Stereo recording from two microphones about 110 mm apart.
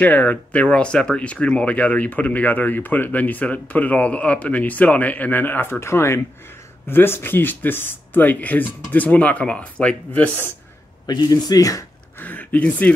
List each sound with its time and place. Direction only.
0.0 s speech: 15° left (ahead or behind)
11.1 s speech: 40° left (ahead or behind)
12.2 s speech: 15° left (ahead or behind)